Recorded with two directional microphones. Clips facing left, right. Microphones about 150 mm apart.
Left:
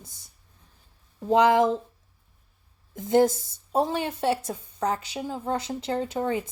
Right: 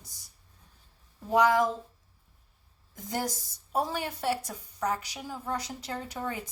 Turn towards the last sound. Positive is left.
turn(degrees=25)  # may be behind; listen again after turning